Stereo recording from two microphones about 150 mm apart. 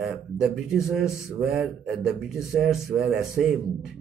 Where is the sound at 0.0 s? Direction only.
5° right (ahead or behind).